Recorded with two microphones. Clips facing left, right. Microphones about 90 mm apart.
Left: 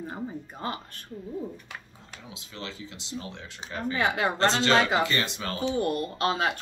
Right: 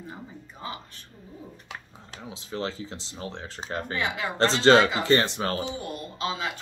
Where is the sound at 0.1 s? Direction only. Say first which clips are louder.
Left 7 dB; 50° left (ahead or behind).